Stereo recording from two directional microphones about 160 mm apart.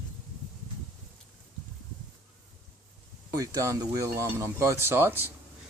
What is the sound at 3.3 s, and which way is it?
Speech, 20° right (ahead or behind).